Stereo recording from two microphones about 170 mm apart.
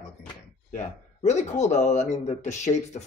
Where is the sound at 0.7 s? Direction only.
45° left (ahead or behind).